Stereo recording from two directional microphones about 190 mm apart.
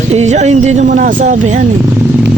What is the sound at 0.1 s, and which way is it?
Speech, 35° right (ahead or behind).